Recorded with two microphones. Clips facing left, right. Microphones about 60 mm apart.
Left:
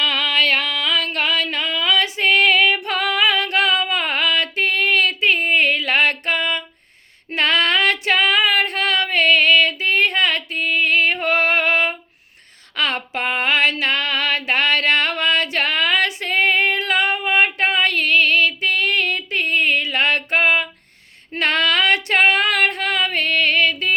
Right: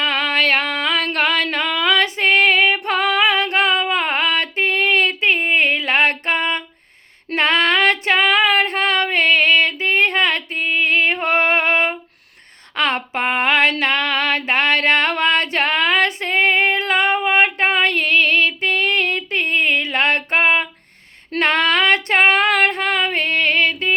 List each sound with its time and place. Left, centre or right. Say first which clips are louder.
0.0 s music: right 1 dB; right
1.0 s female singing: right 3 dB; right